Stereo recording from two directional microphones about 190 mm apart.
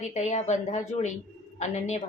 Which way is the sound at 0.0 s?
35° left (ahead or behind).